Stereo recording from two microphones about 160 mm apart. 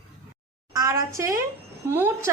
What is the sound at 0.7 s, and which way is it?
A woman's voice, 20° right (ahead or behind).